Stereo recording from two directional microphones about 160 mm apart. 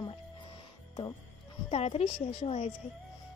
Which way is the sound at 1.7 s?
40° left (ahead or behind).